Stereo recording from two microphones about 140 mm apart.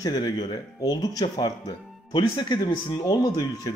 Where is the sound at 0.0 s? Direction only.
30° left (ahead or behind).